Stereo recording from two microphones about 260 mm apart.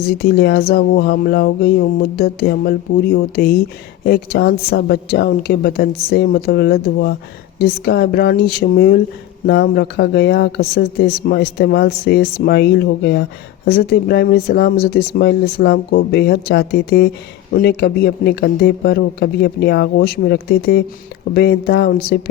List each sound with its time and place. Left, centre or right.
0.0 s speech: left